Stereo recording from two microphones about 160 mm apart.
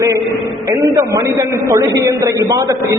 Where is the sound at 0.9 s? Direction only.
20° right (ahead or behind).